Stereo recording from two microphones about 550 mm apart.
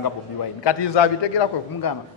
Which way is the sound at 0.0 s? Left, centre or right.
Left.